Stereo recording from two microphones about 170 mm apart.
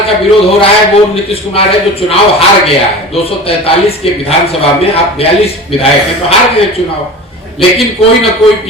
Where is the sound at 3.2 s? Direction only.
35° left (ahead or behind).